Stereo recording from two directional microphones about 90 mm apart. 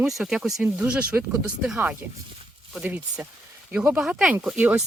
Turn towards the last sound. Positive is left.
turn(degrees=-15)  # may be behind; listen again after turning